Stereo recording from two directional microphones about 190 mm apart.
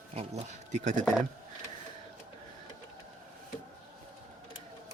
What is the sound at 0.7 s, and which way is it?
Speech, 40° right (ahead or behind).